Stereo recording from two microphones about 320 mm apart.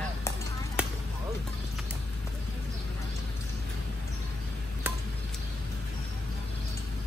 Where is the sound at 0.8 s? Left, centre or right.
Centre.